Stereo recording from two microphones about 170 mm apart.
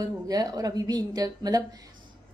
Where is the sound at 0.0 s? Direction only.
20° right (ahead or behind).